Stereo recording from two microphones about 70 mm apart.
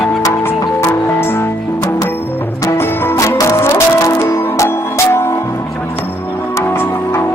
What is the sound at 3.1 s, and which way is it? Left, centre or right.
Music, left.